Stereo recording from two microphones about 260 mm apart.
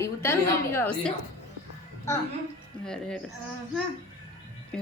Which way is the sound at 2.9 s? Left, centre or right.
Centre.